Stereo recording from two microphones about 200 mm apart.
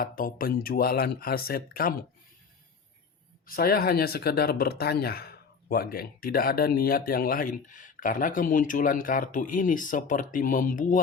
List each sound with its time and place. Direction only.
0.0 s speech: 45° left (ahead or behind)
3.4 s speech: 45° left (ahead or behind)